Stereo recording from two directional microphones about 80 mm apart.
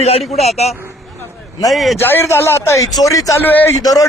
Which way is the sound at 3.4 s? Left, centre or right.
Left.